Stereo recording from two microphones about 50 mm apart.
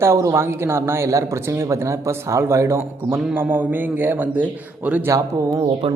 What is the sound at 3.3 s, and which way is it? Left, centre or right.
Speech, right.